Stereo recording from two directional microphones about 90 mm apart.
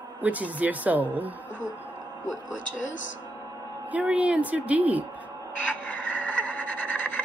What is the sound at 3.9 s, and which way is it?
Speech, 15° right (ahead or behind).